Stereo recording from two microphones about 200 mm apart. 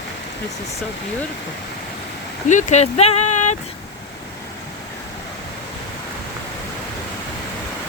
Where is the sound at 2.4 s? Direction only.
35° left (ahead or behind).